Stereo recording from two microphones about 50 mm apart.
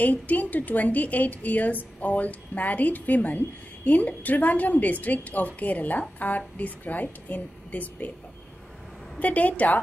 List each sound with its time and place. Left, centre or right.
0.0 s a woman's voice: left
9.2 s a woman's voice: left